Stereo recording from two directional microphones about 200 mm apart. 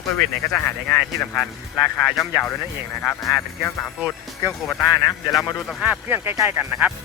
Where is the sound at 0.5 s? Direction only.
5° left (ahead or behind).